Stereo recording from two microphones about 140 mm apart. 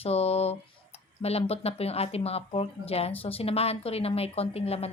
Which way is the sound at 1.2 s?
45° left (ahead or behind).